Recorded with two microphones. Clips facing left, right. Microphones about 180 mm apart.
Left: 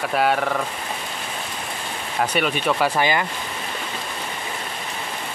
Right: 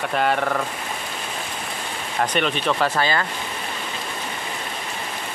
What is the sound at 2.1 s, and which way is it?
Speech, 5° left (ahead or behind).